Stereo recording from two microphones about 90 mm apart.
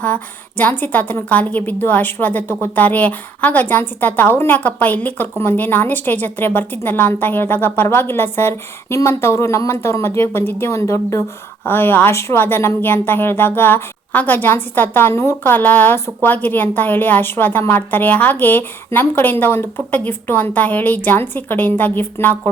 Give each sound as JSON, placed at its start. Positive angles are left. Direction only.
{"t": 0.0, "sound": "a woman's voice", "side_deg": 15}
{"t": 11.6, "sound": "a woman's voice", "side_deg": 20}